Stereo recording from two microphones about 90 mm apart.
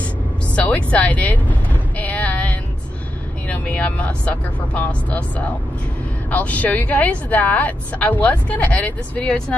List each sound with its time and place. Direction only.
0.0 s music: 15° left (ahead or behind)
3.4 s speech: 15° left (ahead or behind)